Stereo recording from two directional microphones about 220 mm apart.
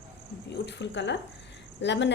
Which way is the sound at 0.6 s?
55° left (ahead or behind).